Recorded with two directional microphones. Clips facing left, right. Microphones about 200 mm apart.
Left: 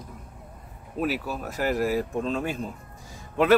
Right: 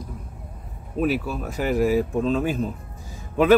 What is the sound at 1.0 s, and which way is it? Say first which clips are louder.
Speech: right 4 dB; 5° left (ahead or behind).